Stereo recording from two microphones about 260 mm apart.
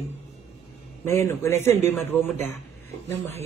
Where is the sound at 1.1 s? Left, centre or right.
Centre.